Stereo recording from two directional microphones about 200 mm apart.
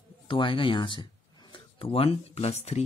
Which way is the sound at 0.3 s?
25° left (ahead or behind).